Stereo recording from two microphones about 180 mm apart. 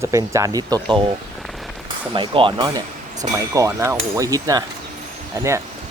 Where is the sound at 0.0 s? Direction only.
15° right (ahead or behind).